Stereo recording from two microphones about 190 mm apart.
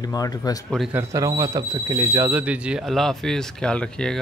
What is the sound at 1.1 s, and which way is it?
Speech, 20° right (ahead or behind).